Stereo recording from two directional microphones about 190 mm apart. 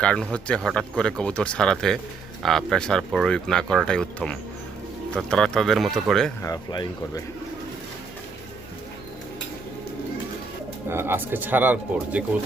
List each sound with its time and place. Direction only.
0.0 s speech: 5° left (ahead or behind)
6.4 s speech: 20° left (ahead or behind)
10.8 s speech: 10° right (ahead or behind)